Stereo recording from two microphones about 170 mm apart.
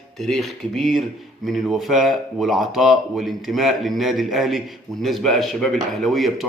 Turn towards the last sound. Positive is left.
turn(degrees=0)  # may be behind; listen again after turning